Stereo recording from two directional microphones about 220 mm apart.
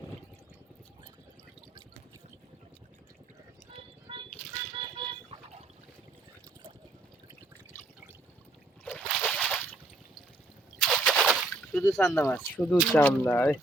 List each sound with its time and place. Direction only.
3.7 s music: 20° right (ahead or behind)
4.8 s vehicle: 20° right (ahead or behind)
8.8 s slosh: 5° left (ahead or behind)
10.8 s machine gun: 5° left (ahead or behind)
11.9 s speech: 15° left (ahead or behind)